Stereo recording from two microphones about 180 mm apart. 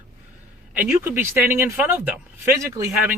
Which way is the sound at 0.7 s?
10° right (ahead or behind).